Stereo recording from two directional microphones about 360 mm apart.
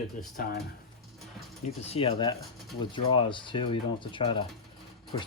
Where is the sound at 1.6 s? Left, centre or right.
Centre.